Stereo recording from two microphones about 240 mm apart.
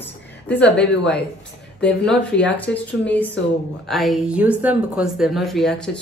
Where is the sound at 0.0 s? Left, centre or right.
Centre.